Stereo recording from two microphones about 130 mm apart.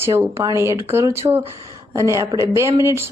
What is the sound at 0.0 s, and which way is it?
A woman's voice, 20° right (ahead or behind).